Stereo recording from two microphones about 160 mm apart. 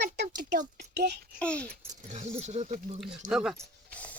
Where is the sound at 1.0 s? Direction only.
90° right.